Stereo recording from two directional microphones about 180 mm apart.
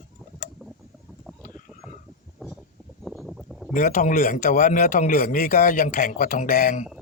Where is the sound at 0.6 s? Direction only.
5° left (ahead or behind).